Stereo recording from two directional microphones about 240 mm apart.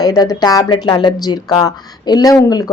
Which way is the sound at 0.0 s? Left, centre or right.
Centre.